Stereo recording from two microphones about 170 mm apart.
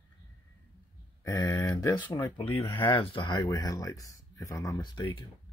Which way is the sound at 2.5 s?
30° left (ahead or behind).